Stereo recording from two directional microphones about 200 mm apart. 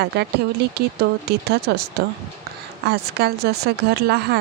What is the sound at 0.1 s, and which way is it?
Speech, 55° right (ahead or behind).